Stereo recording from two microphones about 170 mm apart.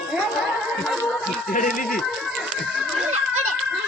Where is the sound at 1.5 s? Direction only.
55° left (ahead or behind).